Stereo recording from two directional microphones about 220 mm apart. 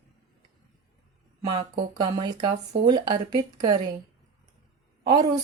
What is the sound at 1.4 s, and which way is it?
Speech, 20° right (ahead or behind).